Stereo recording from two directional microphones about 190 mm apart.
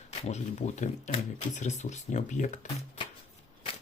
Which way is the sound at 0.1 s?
35° left (ahead or behind).